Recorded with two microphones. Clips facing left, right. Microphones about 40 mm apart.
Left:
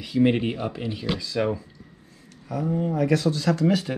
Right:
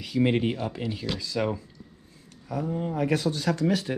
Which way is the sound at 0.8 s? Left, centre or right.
Centre.